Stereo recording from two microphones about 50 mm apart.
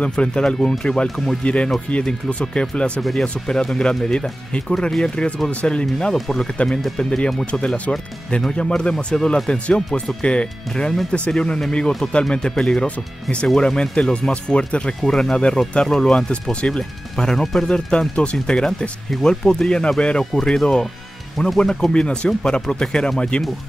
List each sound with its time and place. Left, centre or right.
0.1 s speech: centre
1.4 s speech: left
3.0 s speech: centre; by 15.0 s left
15.0 s speech: centre